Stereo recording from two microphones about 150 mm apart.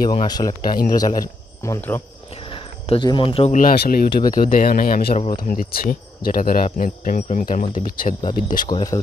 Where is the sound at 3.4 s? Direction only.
65° left (ahead or behind); by 4.1 s 85° left.